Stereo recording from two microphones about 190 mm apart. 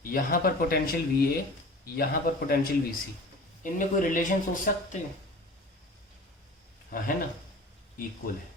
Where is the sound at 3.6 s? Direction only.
45° left (ahead or behind).